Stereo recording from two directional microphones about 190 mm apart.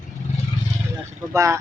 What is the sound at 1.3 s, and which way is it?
Speech, 15° right (ahead or behind).